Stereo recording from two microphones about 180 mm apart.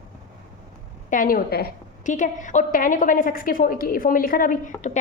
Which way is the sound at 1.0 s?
50° left (ahead or behind).